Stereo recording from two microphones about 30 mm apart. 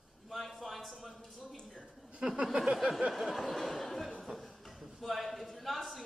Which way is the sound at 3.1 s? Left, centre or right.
Centre.